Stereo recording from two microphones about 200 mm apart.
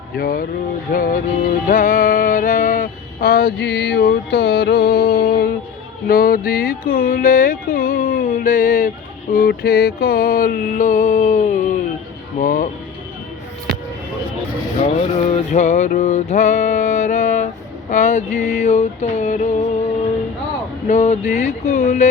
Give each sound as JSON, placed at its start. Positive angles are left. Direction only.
{"t": 0.2, "sound": "music", "side_deg": 45}
{"t": 14.8, "sound": "music", "side_deg": 30}
{"t": 20.8, "sound": "music", "side_deg": 35}